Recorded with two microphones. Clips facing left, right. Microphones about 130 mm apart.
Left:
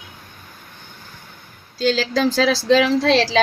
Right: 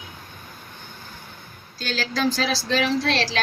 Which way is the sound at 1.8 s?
90° left.